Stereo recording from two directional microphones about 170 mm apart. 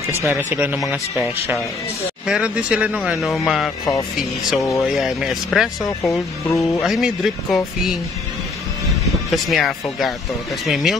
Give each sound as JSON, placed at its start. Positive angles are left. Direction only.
{"t": 0.3, "sound": "speech", "side_deg": -10}
{"t": 0.7, "sound": "speech", "side_deg": 0}
{"t": 6.4, "sound": "speech", "side_deg": 20}
{"t": 6.8, "sound": "speech", "side_deg": 0}
{"t": 9.3, "sound": "speech", "side_deg": 0}